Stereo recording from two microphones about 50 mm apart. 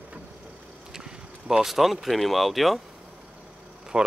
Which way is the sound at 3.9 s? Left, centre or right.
Right.